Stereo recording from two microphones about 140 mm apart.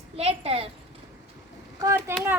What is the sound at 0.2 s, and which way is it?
Speech, 45° right (ahead or behind).